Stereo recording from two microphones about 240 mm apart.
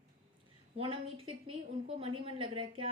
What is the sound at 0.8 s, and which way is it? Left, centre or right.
Speech, right.